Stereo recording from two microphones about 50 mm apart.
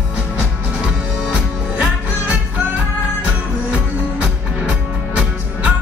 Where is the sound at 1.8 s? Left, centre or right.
Right.